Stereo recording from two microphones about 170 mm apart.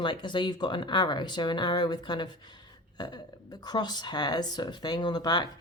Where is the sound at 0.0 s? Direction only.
25° left (ahead or behind).